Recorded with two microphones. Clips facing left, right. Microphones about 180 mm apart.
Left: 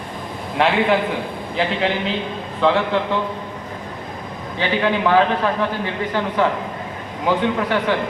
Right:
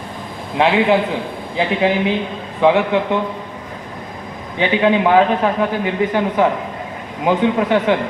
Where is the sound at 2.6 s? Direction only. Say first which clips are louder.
Right 4 dB; 15° right (ahead or behind).